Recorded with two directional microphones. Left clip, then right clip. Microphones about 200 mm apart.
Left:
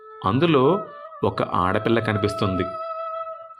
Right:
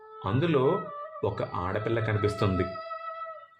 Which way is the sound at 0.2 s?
30° left (ahead or behind).